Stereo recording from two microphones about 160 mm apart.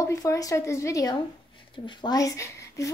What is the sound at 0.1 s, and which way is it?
A woman's voice, 20° left (ahead or behind).